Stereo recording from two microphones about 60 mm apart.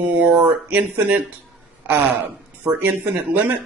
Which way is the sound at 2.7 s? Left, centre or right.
Right.